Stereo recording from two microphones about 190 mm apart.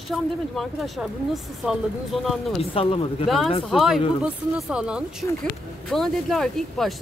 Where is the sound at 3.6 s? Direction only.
Centre (ahead or behind).